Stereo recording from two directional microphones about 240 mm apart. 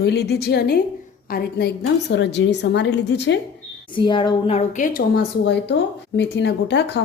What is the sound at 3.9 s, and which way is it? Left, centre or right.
A woman's voice, centre.